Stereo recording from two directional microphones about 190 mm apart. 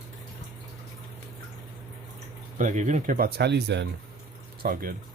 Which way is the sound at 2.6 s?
40° right (ahead or behind).